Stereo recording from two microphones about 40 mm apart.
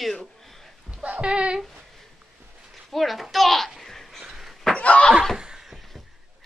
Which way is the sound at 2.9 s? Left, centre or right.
Centre.